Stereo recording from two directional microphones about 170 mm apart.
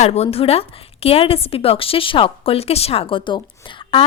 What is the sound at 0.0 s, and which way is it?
A woman's voice, 40° left (ahead or behind).